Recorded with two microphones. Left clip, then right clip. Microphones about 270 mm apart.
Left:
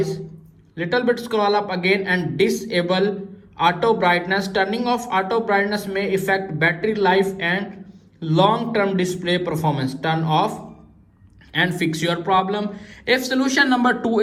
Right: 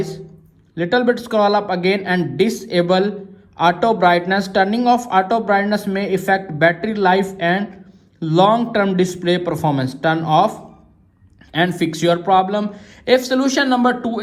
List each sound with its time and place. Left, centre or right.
0.8 s speech: right